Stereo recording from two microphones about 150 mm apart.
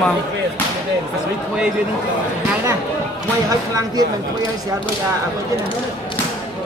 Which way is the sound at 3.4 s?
25° right (ahead or behind).